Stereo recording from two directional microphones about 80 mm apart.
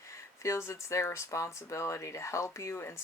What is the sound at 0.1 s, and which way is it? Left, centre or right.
Speech, left.